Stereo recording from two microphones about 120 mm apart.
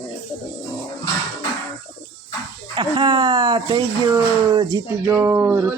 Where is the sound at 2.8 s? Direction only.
35° right (ahead or behind).